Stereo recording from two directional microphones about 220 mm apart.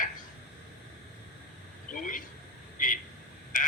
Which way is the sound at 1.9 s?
35° left (ahead or behind).